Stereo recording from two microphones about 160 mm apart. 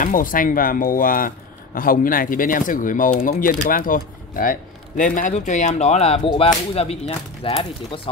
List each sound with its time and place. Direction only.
0.0 s speech: 55° left (ahead or behind); by 8.1 s 35° left (ahead or behind)